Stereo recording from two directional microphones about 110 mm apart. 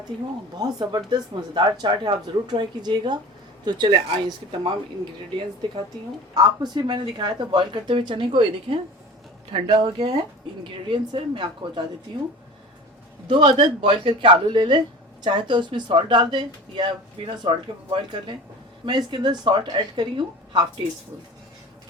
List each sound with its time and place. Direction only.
0.5 s speech: 35° right (ahead or behind)
6.3 s speech: 40° right (ahead or behind)
13.2 s speech: 50° right (ahead or behind)